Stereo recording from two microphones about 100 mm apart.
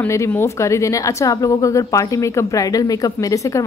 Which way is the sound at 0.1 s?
25° left (ahead or behind).